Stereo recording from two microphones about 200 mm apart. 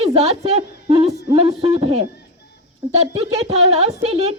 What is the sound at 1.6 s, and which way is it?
A woman's voice, 30° right (ahead or behind).